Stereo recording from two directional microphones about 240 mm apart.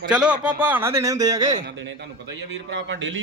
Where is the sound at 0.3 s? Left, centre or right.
Centre.